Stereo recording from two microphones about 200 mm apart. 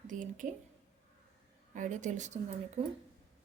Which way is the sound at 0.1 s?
40° right (ahead or behind).